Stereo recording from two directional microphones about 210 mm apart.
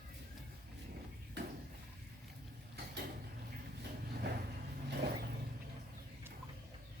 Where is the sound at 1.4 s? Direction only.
55° right (ahead or behind).